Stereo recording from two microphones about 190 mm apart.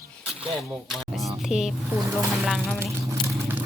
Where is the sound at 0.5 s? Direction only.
Centre (ahead or behind).